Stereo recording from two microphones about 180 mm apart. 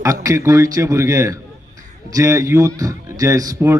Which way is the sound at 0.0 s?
20° right (ahead or behind).